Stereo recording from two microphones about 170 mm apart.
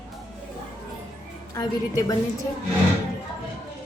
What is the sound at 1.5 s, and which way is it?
Speech, 20° left (ahead or behind).